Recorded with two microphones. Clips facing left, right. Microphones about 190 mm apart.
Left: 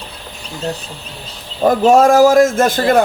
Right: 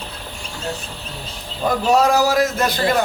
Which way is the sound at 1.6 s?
50° left (ahead or behind).